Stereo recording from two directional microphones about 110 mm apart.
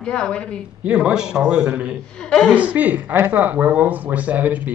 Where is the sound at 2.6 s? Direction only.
15° right (ahead or behind).